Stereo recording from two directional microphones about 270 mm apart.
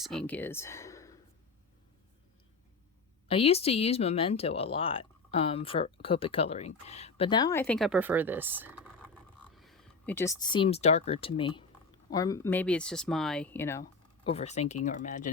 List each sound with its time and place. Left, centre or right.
0.0 s speech: centre
3.2 s speech: left
14.3 s speech: left